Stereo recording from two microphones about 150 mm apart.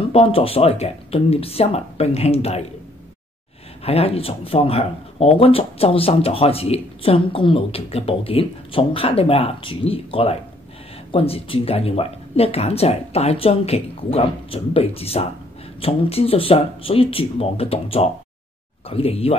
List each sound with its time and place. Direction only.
0.1 s speech: 40° left (ahead or behind)
3.8 s speech: 40° left (ahead or behind)